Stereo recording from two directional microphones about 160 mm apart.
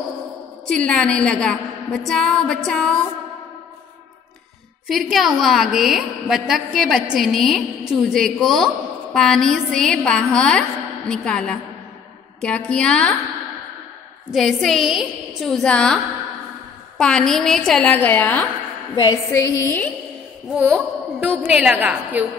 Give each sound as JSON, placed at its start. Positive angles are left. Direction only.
{"t": 0.7, "sound": "a woman's voice", "side_deg": 5}
{"t": 4.8, "sound": "a woman's voice", "side_deg": 0}
{"t": 14.3, "sound": "a woman's voice", "side_deg": 0}
{"t": 17.0, "sound": "a woman's voice", "side_deg": 5}
{"t": 18.9, "sound": "a woman's voice", "side_deg": 25}
{"t": 19.6, "sound": "a woman's voice", "side_deg": 10}
{"t": 20.5, "sound": "a woman's voice", "side_deg": -5}